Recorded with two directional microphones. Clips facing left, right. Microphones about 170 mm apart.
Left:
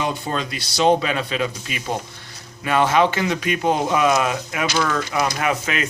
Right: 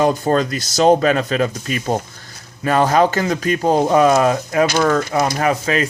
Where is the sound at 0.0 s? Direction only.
45° right (ahead or behind).